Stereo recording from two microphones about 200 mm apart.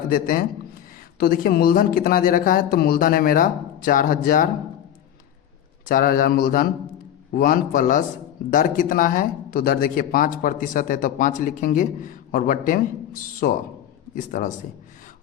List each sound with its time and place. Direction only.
0.1 s speech: 45° left (ahead or behind)
5.8 s a man's voice: 45° left (ahead or behind)